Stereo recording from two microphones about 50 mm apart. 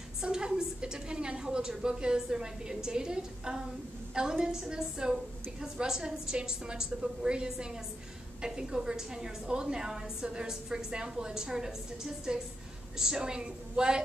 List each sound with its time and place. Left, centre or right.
0.2 s a woman's voice: centre